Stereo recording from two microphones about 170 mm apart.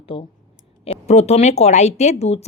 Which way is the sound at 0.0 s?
35° left (ahead or behind).